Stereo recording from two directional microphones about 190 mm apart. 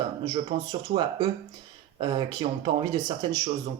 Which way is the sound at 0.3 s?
25° right (ahead or behind).